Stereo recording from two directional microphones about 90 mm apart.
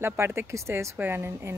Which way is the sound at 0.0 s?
30° right (ahead or behind).